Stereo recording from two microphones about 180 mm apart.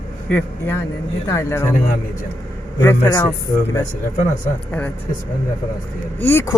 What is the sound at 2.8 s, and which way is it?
Speech, 15° left (ahead or behind).